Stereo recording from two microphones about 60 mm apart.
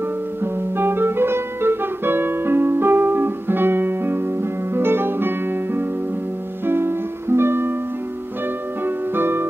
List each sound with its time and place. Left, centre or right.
0.4 s music: right
8.8 s music: right